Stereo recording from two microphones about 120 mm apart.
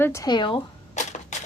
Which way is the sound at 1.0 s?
80° left.